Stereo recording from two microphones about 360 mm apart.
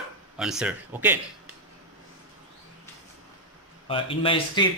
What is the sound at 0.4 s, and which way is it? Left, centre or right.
Speech, centre.